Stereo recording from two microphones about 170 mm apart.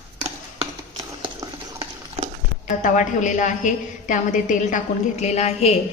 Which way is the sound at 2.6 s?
45° left (ahead or behind).